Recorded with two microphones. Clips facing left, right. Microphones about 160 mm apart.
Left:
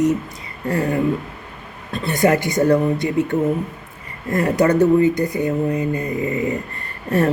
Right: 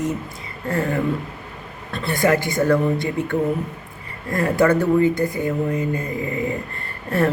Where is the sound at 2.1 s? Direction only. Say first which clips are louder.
Left 2 dB; 20° left (ahead or behind).